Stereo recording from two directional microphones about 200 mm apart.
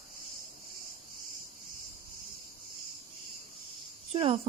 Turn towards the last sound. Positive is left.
turn(degrees=-30)  # may be behind; listen again after turning